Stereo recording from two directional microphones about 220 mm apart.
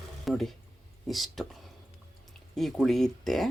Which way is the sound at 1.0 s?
Centre (ahead or behind).